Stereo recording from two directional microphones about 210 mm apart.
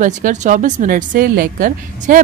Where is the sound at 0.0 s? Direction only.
35° right (ahead or behind).